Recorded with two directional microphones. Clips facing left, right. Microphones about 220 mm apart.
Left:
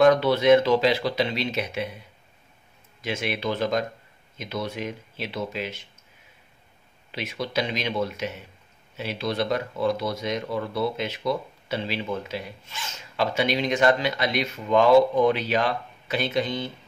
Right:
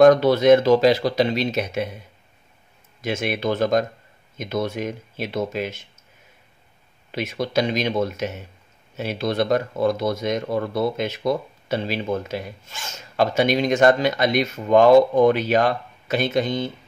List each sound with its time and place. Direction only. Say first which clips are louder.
0.0 s speech: right 5 dB; 45° right (ahead or behind)
3.0 s speech: right 4 dB; 45° right (ahead or behind)
7.1 s speech: right 5 dB; 45° right (ahead or behind)